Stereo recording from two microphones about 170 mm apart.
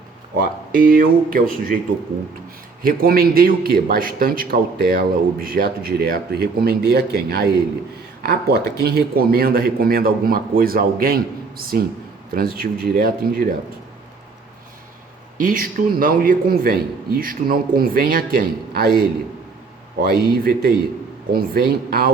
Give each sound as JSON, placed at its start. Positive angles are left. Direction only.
{"t": 0.3, "sound": "a man's voice", "side_deg": -55}
{"t": 2.8, "sound": "a man's voice", "side_deg": -60}
{"t": 15.4, "sound": "a man's voice", "side_deg": -55}